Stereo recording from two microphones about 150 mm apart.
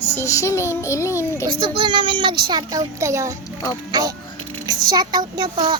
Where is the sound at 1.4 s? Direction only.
35° right (ahead or behind).